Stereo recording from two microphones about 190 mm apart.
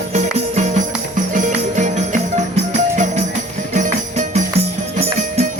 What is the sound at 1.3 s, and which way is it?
Music, 40° right (ahead or behind).